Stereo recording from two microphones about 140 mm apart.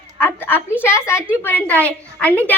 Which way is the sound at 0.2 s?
15° left (ahead or behind).